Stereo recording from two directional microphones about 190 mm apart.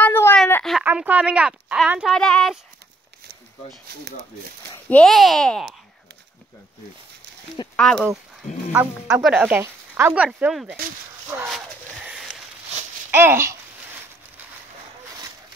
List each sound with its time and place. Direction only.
0.0 s a sound: 10° left (ahead or behind)
0.7 s speech: 5° right (ahead or behind)
3.9 s speech: 60° right (ahead or behind)
4.8 s speech: 5° left (ahead or behind)
7.7 s speech: 5° left (ahead or behind)
11.4 s a sound: 5° right (ahead or behind)
13.1 s speech: 10° right (ahead or behind)